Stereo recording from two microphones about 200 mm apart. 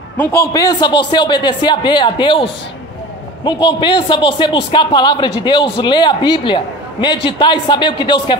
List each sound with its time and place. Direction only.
0.2 s a man's voice: 10° left (ahead or behind)